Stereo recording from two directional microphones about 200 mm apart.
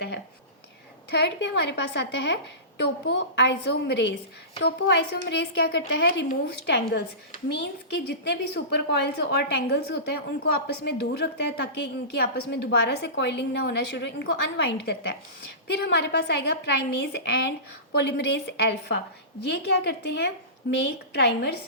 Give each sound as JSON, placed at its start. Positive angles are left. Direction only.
{"t": 1.1, "sound": "a woman's voice", "side_deg": 60}